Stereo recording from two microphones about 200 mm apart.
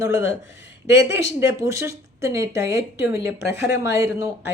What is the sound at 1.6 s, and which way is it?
Speech, 15° right (ahead or behind).